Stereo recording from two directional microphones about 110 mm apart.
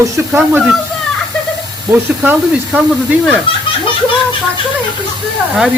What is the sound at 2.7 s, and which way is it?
Speech, centre (ahead or behind).